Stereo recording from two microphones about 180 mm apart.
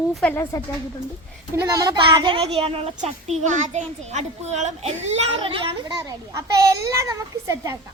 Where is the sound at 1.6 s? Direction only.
20° right (ahead or behind).